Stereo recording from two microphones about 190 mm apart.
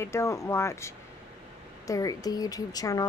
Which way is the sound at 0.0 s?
15° left (ahead or behind).